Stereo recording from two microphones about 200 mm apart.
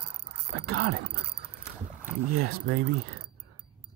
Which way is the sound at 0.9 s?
55° right (ahead or behind).